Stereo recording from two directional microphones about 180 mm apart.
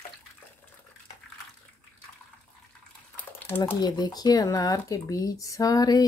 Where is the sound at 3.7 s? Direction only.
25° left (ahead or behind).